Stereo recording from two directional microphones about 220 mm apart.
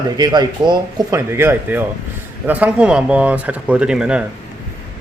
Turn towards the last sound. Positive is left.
turn(degrees=-5)  # may be behind; listen again after turning